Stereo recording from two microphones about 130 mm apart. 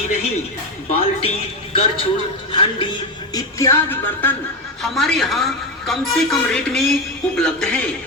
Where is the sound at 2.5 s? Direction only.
40° left (ahead or behind).